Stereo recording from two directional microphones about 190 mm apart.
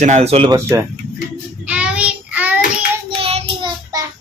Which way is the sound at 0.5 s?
15° right (ahead or behind).